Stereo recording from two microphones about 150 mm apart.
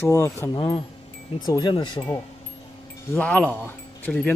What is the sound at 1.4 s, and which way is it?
Speech, 30° left (ahead or behind).